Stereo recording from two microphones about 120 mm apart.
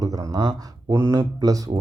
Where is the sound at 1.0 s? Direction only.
30° right (ahead or behind).